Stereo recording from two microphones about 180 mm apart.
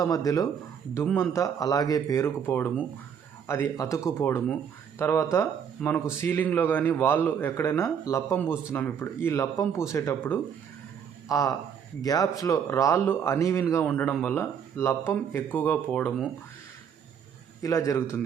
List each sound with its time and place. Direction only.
0.0 s speech: 20° left (ahead or behind)
17.6 s speech: 20° left (ahead or behind)